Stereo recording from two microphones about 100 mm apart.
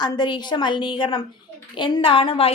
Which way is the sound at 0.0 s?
45° left (ahead or behind).